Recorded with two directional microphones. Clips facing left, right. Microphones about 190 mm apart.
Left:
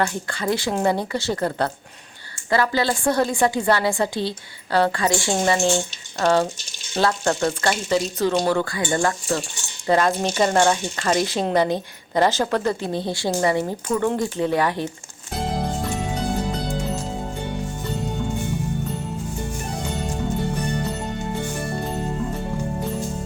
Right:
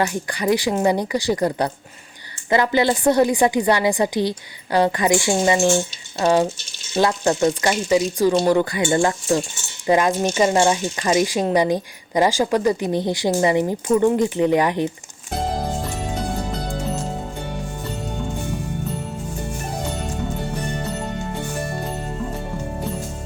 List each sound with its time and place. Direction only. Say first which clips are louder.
0.0 s speech: right 2 dB; 15° right (ahead or behind)